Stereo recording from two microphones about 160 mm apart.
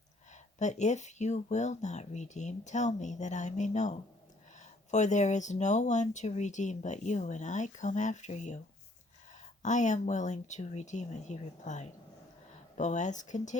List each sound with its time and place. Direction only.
0.6 s speech: 45° left (ahead or behind)